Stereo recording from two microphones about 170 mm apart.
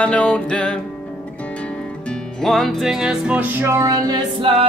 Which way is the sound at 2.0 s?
Centre (ahead or behind).